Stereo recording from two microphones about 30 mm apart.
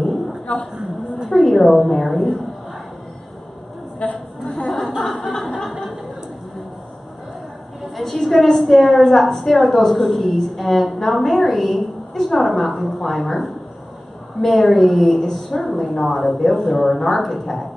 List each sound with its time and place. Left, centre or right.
0.5 s a woman's voice: left
1.3 s a woman's voice: centre
4.0 s a sound: left
4.6 s chuckle: centre
5.1 s chuckle: centre
5.6 s a sound: left
7.9 s a woman's voice: centre